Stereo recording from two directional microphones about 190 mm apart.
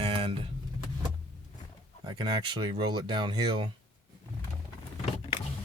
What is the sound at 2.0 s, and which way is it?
Speech, 25° right (ahead or behind).